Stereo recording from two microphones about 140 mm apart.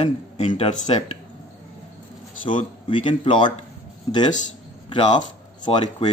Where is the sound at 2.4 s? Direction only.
65° left (ahead or behind).